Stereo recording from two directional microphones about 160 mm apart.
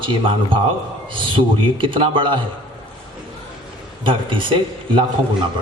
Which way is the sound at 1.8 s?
30° right (ahead or behind).